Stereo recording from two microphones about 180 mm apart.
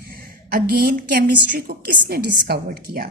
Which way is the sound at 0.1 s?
55° right (ahead or behind).